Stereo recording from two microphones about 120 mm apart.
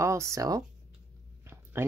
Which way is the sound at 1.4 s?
20° right (ahead or behind).